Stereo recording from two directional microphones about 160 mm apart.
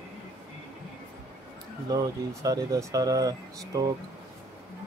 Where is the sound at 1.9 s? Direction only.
20° right (ahead or behind).